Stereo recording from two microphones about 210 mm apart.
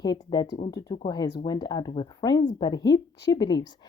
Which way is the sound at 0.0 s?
20° left (ahead or behind).